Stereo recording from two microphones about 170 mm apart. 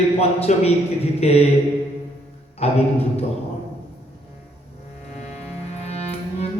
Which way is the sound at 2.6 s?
35° left (ahead or behind).